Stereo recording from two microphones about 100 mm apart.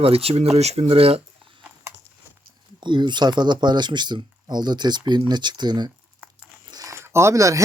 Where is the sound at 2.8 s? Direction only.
50° right (ahead or behind).